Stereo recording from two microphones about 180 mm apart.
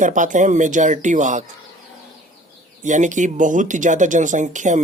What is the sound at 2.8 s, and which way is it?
Speech, 45° right (ahead or behind).